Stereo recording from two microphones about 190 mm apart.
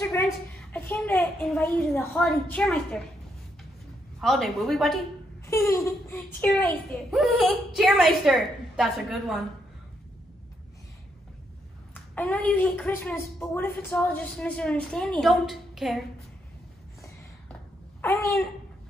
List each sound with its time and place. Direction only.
0.0 s a sound: 15° left (ahead or behind)
0.6 s a child's voice: 10° left (ahead or behind)
4.2 s a child's voice: centre (ahead or behind)
5.8 s a child's voice: 15° left (ahead or behind)
11.9 s a woman's voice: 10° left (ahead or behind)